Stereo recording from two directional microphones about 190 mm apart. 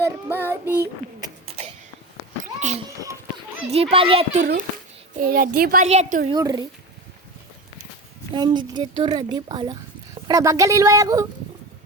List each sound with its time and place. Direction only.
0.0 s child singing: 10° right (ahead or behind)
1.5 s a sound: 35° right (ahead or behind)
3.7 s a child's voice: 30° right (ahead or behind)
5.1 s a child's voice: 50° right (ahead or behind)
6.2 s a woman's voice: 20° right (ahead or behind)
8.3 s a woman's voice: 25° right (ahead or behind)